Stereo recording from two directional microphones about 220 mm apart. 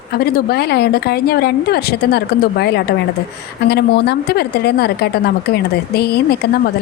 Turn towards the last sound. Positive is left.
turn(degrees=45)  # may be behind; listen again after turning